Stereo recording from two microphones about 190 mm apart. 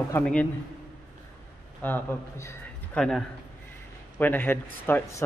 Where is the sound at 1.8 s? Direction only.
10° left (ahead or behind).